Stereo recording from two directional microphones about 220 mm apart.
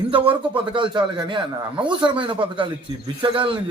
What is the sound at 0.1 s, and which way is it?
Speech, 25° right (ahead or behind).